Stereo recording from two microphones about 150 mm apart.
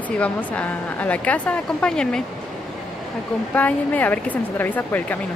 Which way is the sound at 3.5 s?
10° left (ahead or behind).